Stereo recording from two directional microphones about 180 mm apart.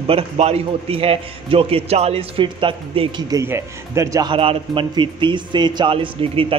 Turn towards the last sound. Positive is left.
turn(degrees=-30)  # may be behind; listen again after turning